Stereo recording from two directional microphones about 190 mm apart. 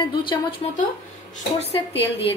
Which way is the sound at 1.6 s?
30° left (ahead or behind).